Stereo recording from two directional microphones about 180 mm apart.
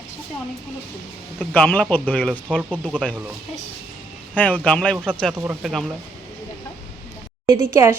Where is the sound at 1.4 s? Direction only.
10° left (ahead or behind).